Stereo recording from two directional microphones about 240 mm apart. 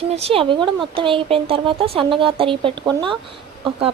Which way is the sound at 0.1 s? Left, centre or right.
Right.